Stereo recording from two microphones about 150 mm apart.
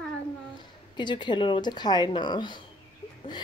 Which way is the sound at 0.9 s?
30° left (ahead or behind).